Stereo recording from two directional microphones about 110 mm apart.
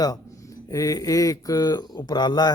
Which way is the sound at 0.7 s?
35° left (ahead or behind).